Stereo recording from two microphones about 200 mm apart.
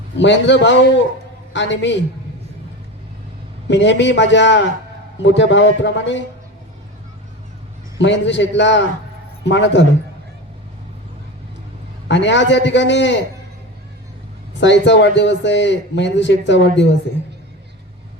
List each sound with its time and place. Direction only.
0.2 s a man's voice: 65° left (ahead or behind)
3.7 s a man's voice: 65° left (ahead or behind)
7.9 s a man's voice: 65° left (ahead or behind)
12.0 s a man's voice: 65° left (ahead or behind)
14.6 s a man's voice: 65° left (ahead or behind)